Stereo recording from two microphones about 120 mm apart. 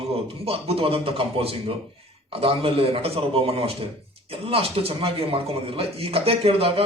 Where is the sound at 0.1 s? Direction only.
55° right (ahead or behind).